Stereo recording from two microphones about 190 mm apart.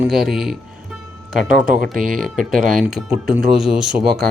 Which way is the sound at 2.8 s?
Centre (ahead or behind).